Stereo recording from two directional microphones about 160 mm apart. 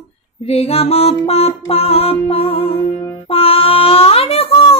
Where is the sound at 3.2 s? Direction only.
35° left (ahead or behind).